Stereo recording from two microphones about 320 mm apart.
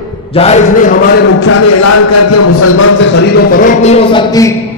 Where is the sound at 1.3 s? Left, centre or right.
Left; by 4.5 s centre.